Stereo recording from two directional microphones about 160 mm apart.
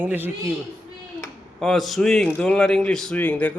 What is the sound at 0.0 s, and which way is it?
Speech, 10° right (ahead or behind).